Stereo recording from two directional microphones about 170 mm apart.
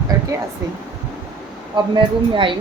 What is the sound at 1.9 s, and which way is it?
Speech, 30° right (ahead or behind).